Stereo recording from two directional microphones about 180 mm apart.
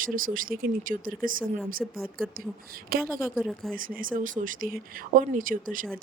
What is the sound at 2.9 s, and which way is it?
Speech, 55° right (ahead or behind).